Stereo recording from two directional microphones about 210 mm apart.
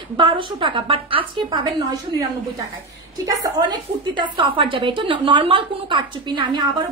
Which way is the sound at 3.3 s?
15° right (ahead or behind).